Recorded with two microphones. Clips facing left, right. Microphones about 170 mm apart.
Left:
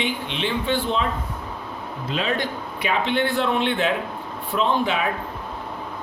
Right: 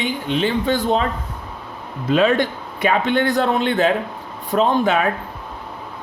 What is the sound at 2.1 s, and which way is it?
A man's voice, 50° right (ahead or behind).